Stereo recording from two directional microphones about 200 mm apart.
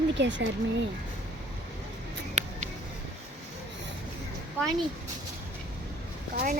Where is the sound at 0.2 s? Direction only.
65° right (ahead or behind).